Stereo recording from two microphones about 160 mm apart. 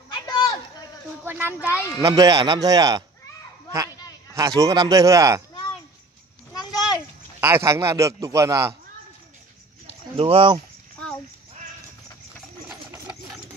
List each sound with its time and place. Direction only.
0.1 s a sound: 25° left (ahead or behind)
1.2 s a man's voice: 10° right (ahead or behind)
4.4 s a man's voice: 20° right (ahead or behind)
6.5 s a sound: 25° left (ahead or behind)
7.3 s a man's voice: 15° right (ahead or behind)
10.1 s speech: 35° right (ahead or behind)
12.9 s sewing machine: 15° right (ahead or behind)